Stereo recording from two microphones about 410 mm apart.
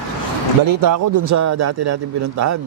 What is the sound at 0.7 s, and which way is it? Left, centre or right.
A man's voice, right.